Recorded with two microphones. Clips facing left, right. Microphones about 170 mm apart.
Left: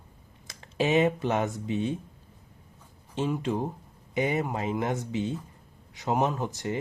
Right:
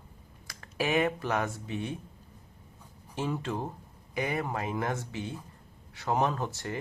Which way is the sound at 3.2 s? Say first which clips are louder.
Left 4 dB; 15° left (ahead or behind).